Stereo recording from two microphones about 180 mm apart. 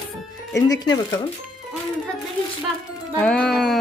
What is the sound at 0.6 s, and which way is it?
Speech, 20° left (ahead or behind).